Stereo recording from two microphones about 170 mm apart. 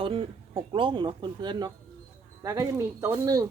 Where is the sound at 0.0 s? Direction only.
30° right (ahead or behind).